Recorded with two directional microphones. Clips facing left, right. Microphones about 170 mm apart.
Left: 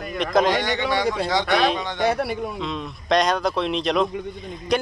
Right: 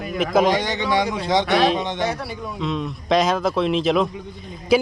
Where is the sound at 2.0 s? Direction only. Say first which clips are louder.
Left 5 dB; 60° left (ahead or behind).